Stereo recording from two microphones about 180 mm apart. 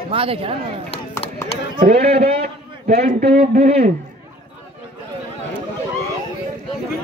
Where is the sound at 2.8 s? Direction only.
55° right (ahead or behind).